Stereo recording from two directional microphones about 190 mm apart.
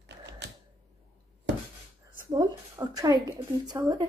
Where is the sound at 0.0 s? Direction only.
65° right (ahead or behind).